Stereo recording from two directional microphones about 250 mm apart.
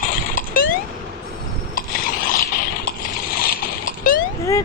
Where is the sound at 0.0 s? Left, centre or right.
Left.